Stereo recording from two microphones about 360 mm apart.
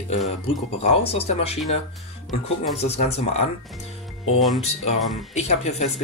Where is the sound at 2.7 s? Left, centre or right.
Centre.